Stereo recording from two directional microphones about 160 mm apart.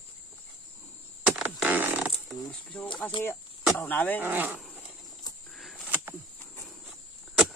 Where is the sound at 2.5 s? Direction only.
10° left (ahead or behind).